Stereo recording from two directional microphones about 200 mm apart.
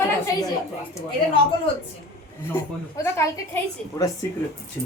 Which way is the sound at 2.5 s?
15° left (ahead or behind).